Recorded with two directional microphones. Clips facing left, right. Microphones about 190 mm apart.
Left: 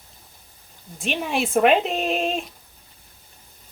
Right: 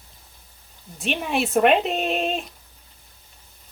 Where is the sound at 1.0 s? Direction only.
Centre (ahead or behind).